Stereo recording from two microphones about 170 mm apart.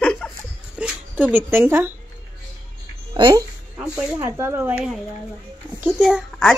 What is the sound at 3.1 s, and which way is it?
Speech, 20° right (ahead or behind).